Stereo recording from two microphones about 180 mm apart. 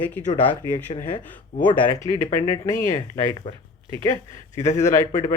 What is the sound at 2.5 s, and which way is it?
Speech, 15° left (ahead or behind).